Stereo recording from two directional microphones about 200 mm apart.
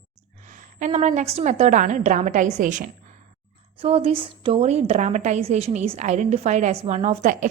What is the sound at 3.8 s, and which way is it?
A woman's voice, 30° right (ahead or behind).